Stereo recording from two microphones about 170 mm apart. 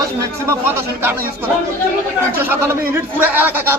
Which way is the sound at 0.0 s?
15° right (ahead or behind).